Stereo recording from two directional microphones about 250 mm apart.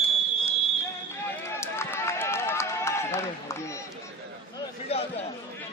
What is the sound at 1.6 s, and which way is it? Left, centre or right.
Run, centre.